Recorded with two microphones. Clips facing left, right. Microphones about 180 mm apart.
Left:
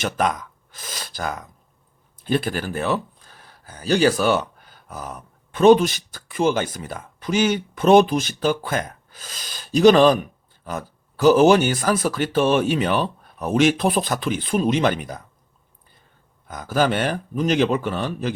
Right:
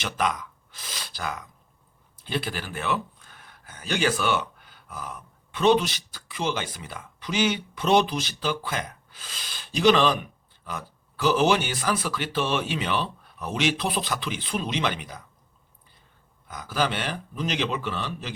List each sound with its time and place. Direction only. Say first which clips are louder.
0.0 s speech: left 5 dB; 45° left (ahead or behind)
16.5 s speech: left 6 dB; 50° left (ahead or behind)